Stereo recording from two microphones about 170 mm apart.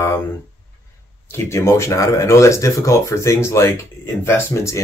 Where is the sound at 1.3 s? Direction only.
15° left (ahead or behind).